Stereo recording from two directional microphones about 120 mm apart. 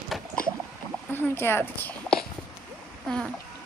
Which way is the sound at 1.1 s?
20° left (ahead or behind).